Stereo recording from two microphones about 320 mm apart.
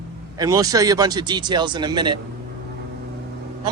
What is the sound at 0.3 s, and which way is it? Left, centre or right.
Speech, centre.